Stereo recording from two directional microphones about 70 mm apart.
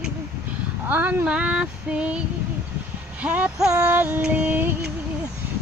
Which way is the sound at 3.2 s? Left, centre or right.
Right.